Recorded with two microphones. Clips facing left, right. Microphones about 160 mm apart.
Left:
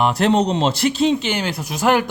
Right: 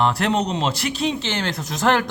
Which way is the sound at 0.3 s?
30° left (ahead or behind).